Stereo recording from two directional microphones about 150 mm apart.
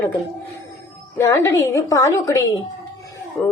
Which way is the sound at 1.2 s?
20° left (ahead or behind).